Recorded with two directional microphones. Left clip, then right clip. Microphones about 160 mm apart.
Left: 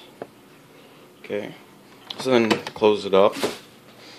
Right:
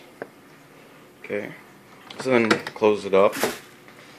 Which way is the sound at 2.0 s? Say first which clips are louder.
Even; 5° left (ahead or behind).